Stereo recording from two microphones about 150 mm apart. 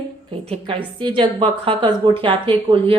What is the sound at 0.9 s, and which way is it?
Speech, 35° right (ahead or behind).